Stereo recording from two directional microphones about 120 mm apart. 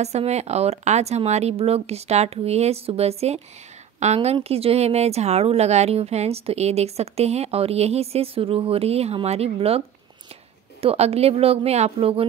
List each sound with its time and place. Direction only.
0.0 s a woman's voice: 65° right (ahead or behind)